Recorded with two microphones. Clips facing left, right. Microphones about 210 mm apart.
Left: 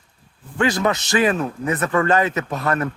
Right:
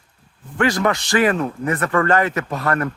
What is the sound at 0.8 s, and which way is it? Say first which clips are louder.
Speech: right 1 dB; 20° left (ahead or behind).